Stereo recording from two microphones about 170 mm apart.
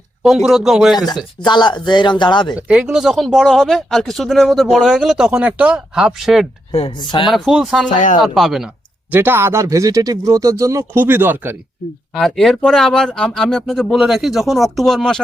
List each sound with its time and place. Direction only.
0.2 s speech: 5° right (ahead or behind)
0.9 s speech: 25° left (ahead or behind)
2.6 s speech: 5° right (ahead or behind)
6.7 s speech: 35° left (ahead or behind)
7.3 s speech: centre (ahead or behind)
7.9 s speech: 50° left (ahead or behind)
8.2 s speech: centre (ahead or behind)
9.1 s speech: 10° right (ahead or behind)
12.1 s speech: centre (ahead or behind)